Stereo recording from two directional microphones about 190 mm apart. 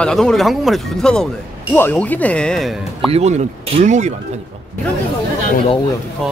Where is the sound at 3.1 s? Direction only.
35° right (ahead or behind).